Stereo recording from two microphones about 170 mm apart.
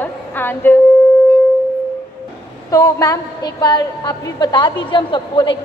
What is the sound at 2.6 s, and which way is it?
A woman's voice, 20° left (ahead or behind).